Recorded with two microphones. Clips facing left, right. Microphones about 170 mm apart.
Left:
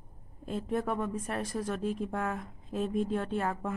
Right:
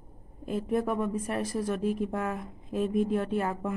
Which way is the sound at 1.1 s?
35° right (ahead or behind).